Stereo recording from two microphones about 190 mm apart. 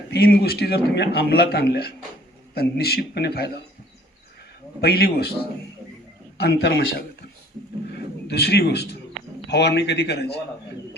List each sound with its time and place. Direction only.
0.1 s a man's voice: 55° left (ahead or behind)
4.8 s a man's voice: 55° left (ahead or behind)
6.3 s a man's voice: 60° left (ahead or behind)
8.3 s a man's voice: 60° left (ahead or behind)